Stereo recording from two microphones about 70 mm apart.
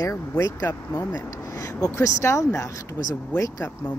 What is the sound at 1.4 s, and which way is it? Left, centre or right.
Speech, left.